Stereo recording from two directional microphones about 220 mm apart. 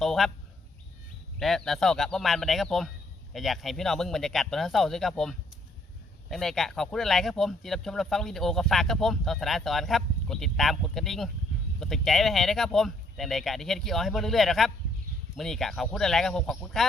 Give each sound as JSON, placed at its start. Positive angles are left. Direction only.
{"t": 0.0, "sound": "speech", "side_deg": 0}
{"t": 1.4, "sound": "speech", "side_deg": 0}